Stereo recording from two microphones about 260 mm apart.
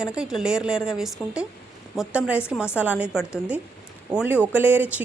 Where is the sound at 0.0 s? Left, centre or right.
Centre.